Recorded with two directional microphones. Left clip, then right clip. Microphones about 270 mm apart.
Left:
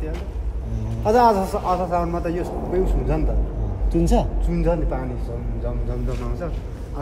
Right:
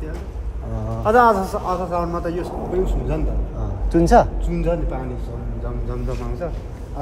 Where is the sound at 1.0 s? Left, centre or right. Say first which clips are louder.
Right 2 dB; centre.